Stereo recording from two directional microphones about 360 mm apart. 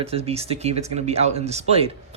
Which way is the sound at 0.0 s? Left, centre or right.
Centre.